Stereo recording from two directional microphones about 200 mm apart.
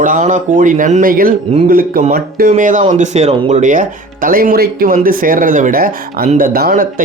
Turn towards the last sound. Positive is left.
turn(degrees=-45)  # may be behind; listen again after turning